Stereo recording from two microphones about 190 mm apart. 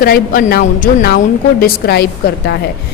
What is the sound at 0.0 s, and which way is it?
A woman's voice, 50° left (ahead or behind).